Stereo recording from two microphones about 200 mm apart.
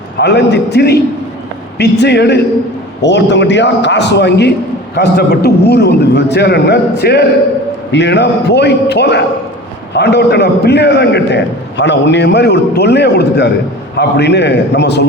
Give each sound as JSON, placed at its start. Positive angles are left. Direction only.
{"t": 0.2, "sound": "a man's voice", "side_deg": 55}